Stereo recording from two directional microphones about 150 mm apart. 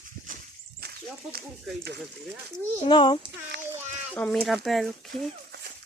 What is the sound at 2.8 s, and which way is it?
Speech, 35° left (ahead or behind).